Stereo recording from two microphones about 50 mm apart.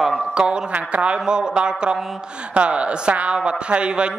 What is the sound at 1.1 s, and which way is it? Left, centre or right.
A man's voice, centre.